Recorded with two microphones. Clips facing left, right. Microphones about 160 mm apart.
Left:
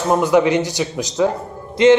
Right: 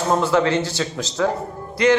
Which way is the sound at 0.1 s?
15° left (ahead or behind).